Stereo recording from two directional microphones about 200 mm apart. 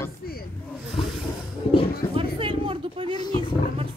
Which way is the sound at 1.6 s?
30° left (ahead or behind).